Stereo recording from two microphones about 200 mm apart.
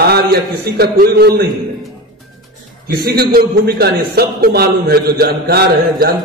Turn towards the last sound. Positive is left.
turn(degrees=-50)  # may be behind; listen again after turning